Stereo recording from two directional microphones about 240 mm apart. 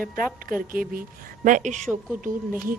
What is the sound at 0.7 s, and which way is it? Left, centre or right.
Speech, right.